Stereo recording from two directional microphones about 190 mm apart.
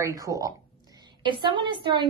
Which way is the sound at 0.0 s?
15° right (ahead or behind).